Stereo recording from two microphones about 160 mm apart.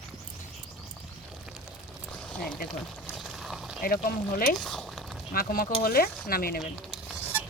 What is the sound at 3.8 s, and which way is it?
Speech, 65° left (ahead or behind).